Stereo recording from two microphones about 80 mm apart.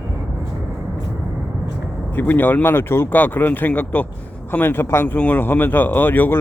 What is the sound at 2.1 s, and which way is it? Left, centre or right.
Speech, left.